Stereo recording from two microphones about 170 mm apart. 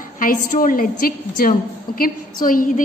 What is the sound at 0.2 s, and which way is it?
A woman's voice, 55° left (ahead or behind).